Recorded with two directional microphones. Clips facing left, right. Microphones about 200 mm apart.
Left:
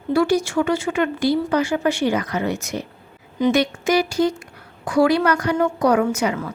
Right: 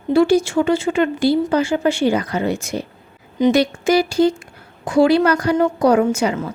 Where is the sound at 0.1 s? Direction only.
25° right (ahead or behind).